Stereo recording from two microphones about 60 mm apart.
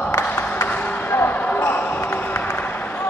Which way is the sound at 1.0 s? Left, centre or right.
Left.